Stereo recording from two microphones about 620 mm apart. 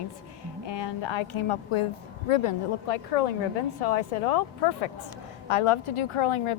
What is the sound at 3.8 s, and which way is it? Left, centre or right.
A woman's voice, left.